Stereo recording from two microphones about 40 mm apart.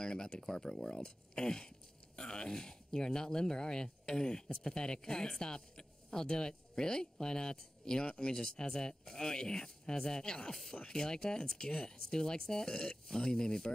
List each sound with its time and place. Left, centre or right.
0.0 s speech: centre